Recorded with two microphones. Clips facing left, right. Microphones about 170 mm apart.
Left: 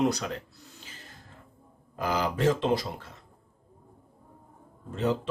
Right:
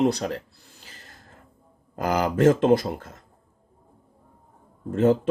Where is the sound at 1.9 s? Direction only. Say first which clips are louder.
Right 5 dB; 45° right (ahead or behind).